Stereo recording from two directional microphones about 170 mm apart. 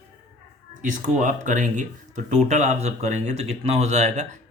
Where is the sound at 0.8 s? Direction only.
50° right (ahead or behind).